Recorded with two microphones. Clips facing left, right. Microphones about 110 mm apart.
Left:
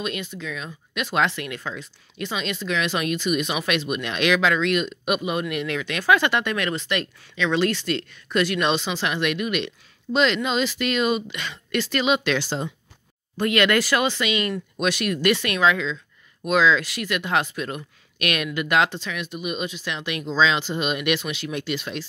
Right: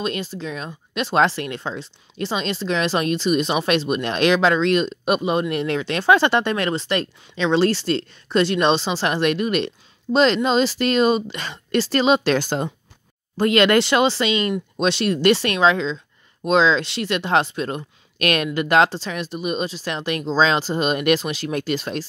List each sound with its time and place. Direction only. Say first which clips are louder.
0.0 s speech: right 4 dB; 35° right (ahead or behind)
12.4 s speech: right 4 dB; 50° right (ahead or behind)
13.4 s speech: right 4 dB; 30° right (ahead or behind)